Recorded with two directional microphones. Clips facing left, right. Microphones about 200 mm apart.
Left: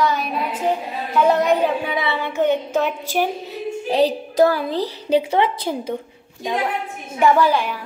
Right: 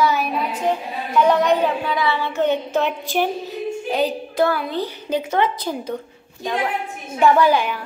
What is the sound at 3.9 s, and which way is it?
A woman's voice, 35° left (ahead or behind).